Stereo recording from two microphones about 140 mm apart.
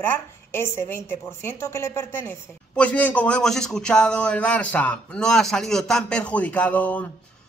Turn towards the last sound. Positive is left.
turn(degrees=10)  # may be behind; listen again after turning